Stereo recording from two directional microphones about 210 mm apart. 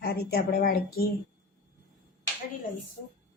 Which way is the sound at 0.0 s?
50° left (ahead or behind).